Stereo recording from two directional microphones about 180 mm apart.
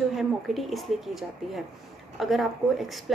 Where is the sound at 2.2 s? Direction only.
Centre (ahead or behind).